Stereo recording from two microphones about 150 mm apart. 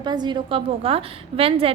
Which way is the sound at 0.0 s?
30° right (ahead or behind).